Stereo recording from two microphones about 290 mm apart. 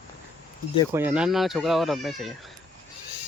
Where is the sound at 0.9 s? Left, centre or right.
Centre.